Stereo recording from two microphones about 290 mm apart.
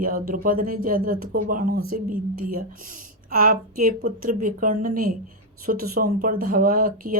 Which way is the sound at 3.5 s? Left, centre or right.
Right.